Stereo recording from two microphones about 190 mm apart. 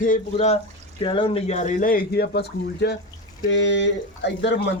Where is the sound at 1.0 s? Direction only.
25° left (ahead or behind); by 2.9 s 60° left (ahead or behind).